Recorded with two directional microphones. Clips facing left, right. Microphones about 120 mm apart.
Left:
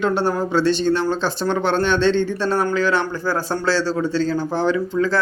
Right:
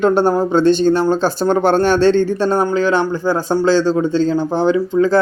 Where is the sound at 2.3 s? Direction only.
35° right (ahead or behind).